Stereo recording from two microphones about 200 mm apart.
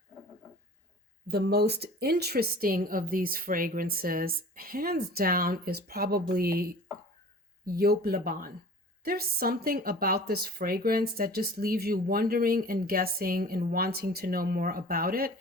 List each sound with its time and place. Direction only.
1.3 s speech: 55° right (ahead or behind)